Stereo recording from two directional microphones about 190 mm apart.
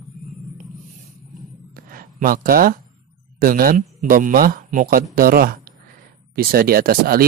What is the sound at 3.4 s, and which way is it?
Speech, 50° right (ahead or behind).